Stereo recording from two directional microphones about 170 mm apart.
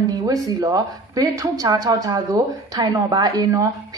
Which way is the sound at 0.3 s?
20° right (ahead or behind).